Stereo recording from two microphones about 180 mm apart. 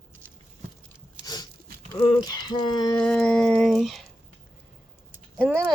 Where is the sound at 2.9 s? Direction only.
5° left (ahead or behind).